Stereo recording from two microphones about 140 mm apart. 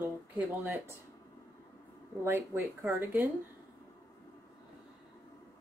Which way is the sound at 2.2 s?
15° right (ahead or behind).